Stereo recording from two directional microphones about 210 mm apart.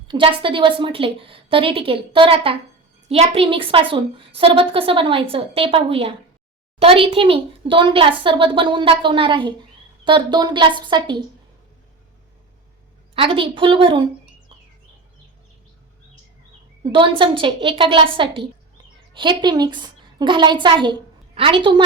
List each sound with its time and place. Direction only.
0.1 s speech: 25° right (ahead or behind)
13.1 s speech: 25° right (ahead or behind)
16.8 s a woman's voice: 25° right (ahead or behind)